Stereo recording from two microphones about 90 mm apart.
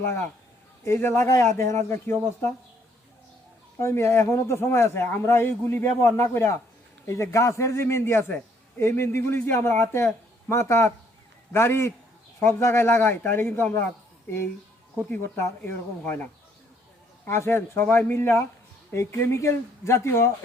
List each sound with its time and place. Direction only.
0.0 s speech: 25° left (ahead or behind)
3.8 s a man's voice: 30° left (ahead or behind)
15.1 s speech: 25° left (ahead or behind)
17.2 s a man's voice: 25° left (ahead or behind)